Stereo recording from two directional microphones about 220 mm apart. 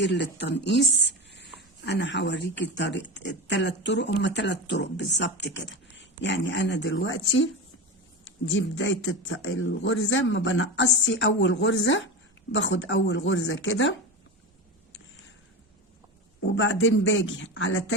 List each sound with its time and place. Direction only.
0.0 s speech: 55° left (ahead or behind)
16.5 s speech: 60° left (ahead or behind)